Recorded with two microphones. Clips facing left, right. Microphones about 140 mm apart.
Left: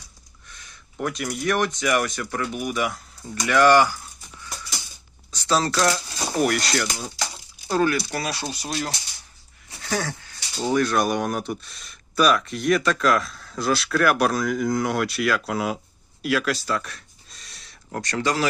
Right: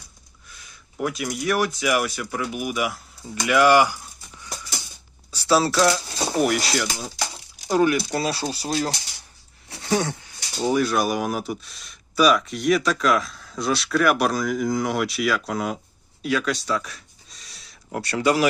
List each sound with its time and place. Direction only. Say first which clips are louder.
0.4 s speech: left 1 dB; 5° right (ahead or behind)
7.7 s speech: right 2 dB; 15° right (ahead or behind)
10.6 s speech: even; 5° right (ahead or behind)
16.2 s a sound: even; centre (ahead or behind)